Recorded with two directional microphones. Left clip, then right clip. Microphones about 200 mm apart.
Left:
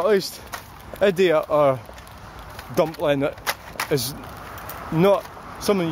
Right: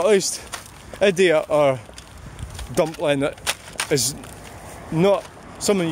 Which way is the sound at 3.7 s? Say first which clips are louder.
Right 3 dB; 10° right (ahead or behind).